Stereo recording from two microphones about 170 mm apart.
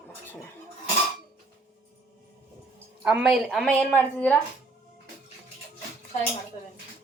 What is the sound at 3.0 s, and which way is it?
A woman's voice, 5° right (ahead or behind).